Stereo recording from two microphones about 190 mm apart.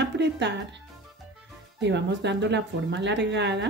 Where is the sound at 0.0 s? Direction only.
65° right (ahead or behind).